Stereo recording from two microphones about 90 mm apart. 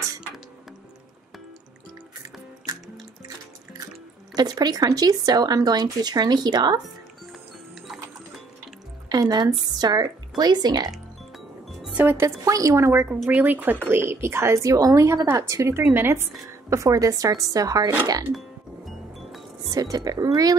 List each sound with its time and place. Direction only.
4.4 s speech: 45° right (ahead or behind)
9.1 s speech: 50° right (ahead or behind)
11.9 s music: 20° right (ahead or behind)
12.2 s speech: 35° right (ahead or behind)
16.7 s speech: 40° right (ahead or behind)
19.7 s speech: 40° right (ahead or behind)